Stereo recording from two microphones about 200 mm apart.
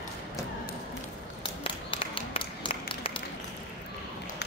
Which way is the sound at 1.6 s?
25° left (ahead or behind).